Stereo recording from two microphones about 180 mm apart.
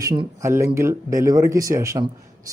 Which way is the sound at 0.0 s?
20° right (ahead or behind).